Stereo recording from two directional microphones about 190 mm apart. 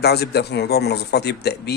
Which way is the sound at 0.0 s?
60° left (ahead or behind).